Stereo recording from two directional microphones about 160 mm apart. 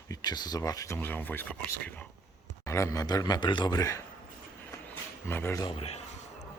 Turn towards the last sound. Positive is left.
turn(degrees=35)  # may be behind; listen again after turning